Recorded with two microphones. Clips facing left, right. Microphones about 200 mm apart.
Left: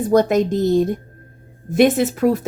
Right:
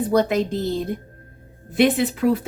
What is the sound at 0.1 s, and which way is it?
Speech, 45° left (ahead or behind).